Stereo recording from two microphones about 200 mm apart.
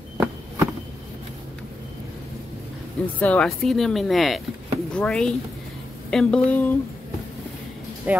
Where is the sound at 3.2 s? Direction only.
5° left (ahead or behind).